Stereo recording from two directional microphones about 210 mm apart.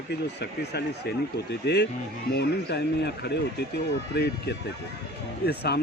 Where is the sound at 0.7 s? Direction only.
50° left (ahead or behind).